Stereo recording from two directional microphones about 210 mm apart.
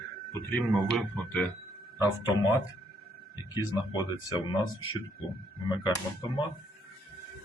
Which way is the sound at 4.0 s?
20° left (ahead or behind).